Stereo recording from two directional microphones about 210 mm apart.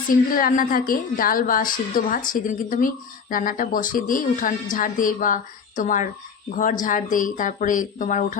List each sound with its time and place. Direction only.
0.3 s a woman's voice: 40° left (ahead or behind)